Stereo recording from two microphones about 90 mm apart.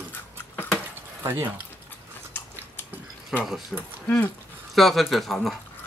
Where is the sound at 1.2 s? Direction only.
25° right (ahead or behind).